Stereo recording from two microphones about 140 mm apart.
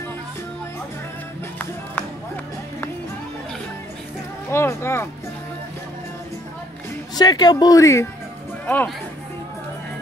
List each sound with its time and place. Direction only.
4.5 s speech: 20° left (ahead or behind)
7.2 s speech: 30° left (ahead or behind); by 8.9 s 10° left (ahead or behind)